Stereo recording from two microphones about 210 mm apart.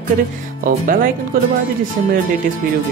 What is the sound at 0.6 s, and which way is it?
Speech, 40° right (ahead or behind).